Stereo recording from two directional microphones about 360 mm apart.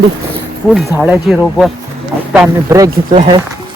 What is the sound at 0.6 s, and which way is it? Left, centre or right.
Speech, centre.